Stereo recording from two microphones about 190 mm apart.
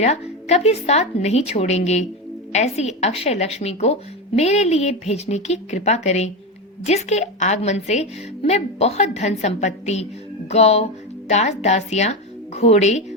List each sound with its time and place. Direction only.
0.0 s a woman's voice: 35° left (ahead or behind)